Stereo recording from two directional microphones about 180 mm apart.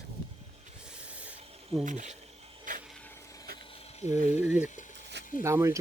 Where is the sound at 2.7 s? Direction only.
45° right (ahead or behind).